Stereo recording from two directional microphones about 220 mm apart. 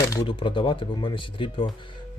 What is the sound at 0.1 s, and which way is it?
Speech, 20° left (ahead or behind).